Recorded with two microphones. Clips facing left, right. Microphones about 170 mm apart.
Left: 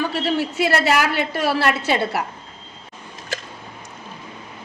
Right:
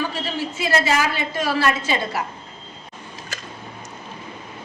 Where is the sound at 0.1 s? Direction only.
65° left (ahead or behind).